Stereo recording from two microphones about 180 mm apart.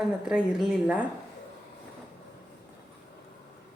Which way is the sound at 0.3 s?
5° right (ahead or behind).